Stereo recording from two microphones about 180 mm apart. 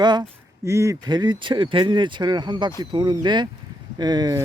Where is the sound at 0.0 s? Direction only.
25° right (ahead or behind).